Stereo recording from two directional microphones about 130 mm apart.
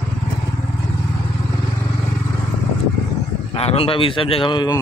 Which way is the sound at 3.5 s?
50° left (ahead or behind).